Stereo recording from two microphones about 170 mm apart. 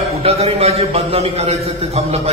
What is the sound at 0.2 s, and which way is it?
A man's voice, 35° right (ahead or behind).